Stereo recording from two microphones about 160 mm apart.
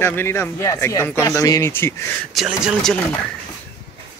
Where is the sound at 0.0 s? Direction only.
15° left (ahead or behind).